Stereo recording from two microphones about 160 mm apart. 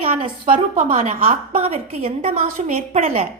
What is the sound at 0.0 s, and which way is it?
Speech, 40° right (ahead or behind).